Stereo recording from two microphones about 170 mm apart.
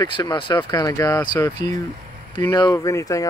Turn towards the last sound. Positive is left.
turn(degrees=20)  # may be behind; listen again after turning